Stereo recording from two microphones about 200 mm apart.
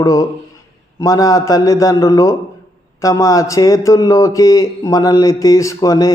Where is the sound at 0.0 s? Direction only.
15° left (ahead or behind).